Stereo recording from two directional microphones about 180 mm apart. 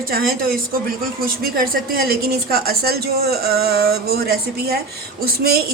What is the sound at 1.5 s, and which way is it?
A woman's voice, 55° right (ahead or behind).